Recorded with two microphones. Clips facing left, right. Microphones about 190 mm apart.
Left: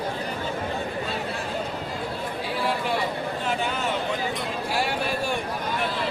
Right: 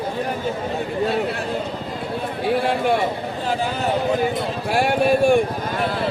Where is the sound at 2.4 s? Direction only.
60° right (ahead or behind).